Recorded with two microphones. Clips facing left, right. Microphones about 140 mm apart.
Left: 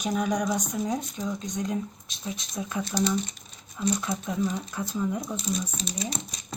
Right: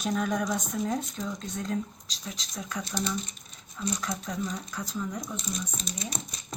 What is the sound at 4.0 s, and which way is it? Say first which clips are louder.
Speech: left 4 dB; 25° left (ahead or behind).